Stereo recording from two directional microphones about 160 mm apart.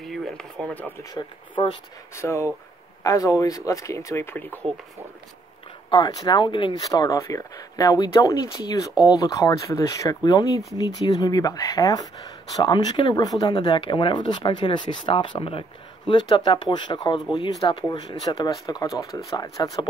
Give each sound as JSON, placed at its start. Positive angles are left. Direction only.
{"t": 0.0, "sound": "a sound", "side_deg": 0}
{"t": 1.1, "sound": "speech", "side_deg": 30}
{"t": 2.1, "sound": "speech", "side_deg": 15}
{"t": 5.9, "sound": "speech", "side_deg": 25}